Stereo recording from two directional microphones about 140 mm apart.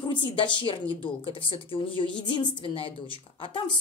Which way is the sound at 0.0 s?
35° left (ahead or behind).